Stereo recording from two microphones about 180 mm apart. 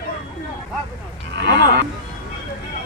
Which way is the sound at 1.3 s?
75° right (ahead or behind).